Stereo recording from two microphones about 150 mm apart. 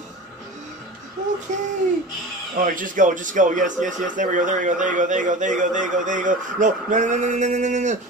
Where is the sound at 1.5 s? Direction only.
55° right (ahead or behind).